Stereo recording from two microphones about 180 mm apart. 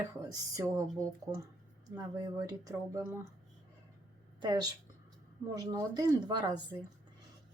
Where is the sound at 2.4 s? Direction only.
15° right (ahead or behind).